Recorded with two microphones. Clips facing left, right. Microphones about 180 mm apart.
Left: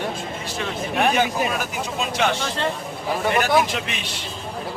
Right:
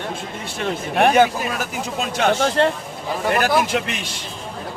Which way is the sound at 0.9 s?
50° right (ahead or behind).